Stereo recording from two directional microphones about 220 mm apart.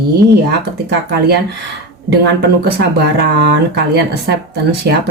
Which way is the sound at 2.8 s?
50° right (ahead or behind).